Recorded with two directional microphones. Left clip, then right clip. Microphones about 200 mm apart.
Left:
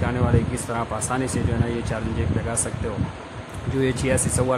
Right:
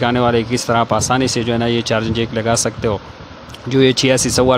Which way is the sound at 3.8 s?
40° right (ahead or behind).